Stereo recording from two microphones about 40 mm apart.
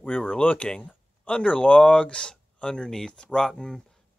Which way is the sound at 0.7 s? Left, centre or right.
Left.